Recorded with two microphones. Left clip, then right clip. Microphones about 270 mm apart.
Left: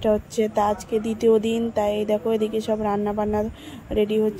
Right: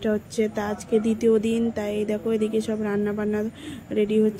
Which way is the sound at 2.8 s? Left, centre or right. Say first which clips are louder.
Left 3 dB; left.